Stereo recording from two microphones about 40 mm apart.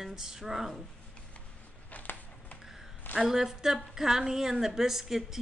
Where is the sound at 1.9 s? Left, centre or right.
Left.